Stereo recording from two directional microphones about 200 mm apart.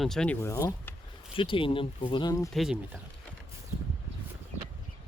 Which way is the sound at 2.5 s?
Centre (ahead or behind).